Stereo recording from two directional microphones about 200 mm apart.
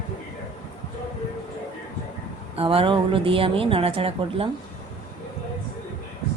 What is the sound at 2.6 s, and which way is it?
A woman's voice, 30° right (ahead or behind).